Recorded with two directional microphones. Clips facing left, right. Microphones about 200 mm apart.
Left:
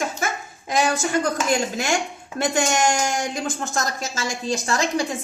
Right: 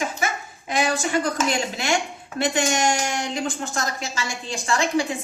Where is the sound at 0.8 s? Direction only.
45° left (ahead or behind).